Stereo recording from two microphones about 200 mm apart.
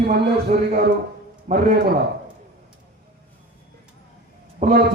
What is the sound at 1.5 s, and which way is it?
Speech, 40° right (ahead or behind).